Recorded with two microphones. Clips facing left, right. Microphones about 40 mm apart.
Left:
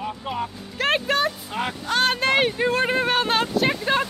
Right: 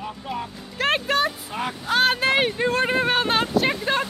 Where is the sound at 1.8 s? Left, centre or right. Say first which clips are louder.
Right 2 dB; centre.